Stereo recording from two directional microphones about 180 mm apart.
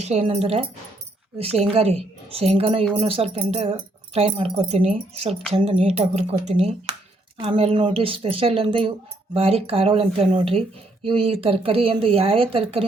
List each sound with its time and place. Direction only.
0.0 s speech: 35° right (ahead or behind)